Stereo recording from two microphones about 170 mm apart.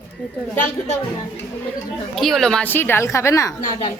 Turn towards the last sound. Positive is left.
turn(degrees=20)  # may be behind; listen again after turning